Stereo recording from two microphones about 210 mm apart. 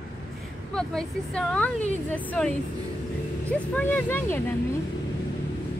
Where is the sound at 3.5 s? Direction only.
10° left (ahead or behind).